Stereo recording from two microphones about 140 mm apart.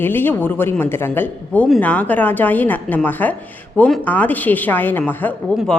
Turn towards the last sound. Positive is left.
turn(degrees=15)  # may be behind; listen again after turning